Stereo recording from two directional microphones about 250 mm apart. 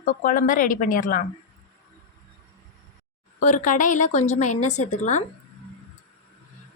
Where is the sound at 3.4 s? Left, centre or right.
Left.